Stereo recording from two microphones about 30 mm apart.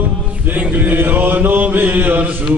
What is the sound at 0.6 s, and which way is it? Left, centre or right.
Music, right.